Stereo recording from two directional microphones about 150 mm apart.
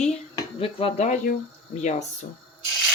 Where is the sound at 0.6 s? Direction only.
40° left (ahead or behind).